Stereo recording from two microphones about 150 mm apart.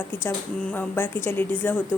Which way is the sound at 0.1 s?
15° left (ahead or behind).